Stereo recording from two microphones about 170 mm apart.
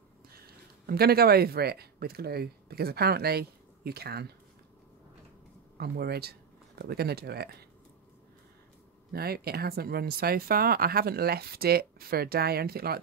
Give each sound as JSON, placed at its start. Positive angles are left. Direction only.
{"t": 0.8, "sound": "speech", "side_deg": -65}
{"t": 5.8, "sound": "speech", "side_deg": -65}
{"t": 9.1, "sound": "speech", "side_deg": -65}